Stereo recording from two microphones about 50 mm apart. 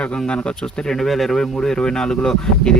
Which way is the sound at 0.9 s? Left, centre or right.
Centre.